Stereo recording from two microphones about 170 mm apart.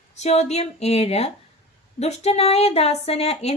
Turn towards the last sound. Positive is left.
turn(degrees=40)  # may be behind; listen again after turning